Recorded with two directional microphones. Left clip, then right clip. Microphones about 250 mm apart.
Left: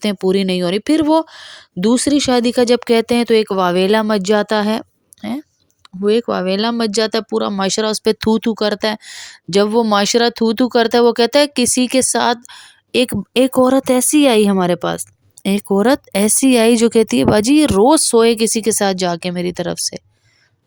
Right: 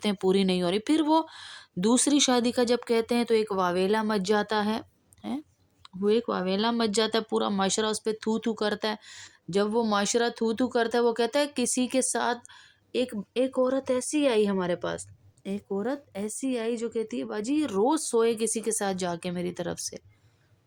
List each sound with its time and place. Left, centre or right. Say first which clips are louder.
0.0 s speech: left 9 dB; left